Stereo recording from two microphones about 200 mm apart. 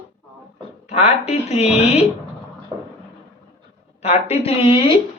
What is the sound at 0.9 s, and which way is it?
Speech, 30° left (ahead or behind).